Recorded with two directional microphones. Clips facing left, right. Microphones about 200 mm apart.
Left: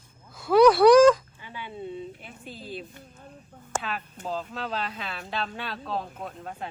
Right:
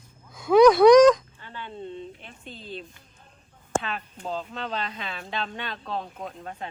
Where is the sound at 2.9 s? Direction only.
45° left (ahead or behind).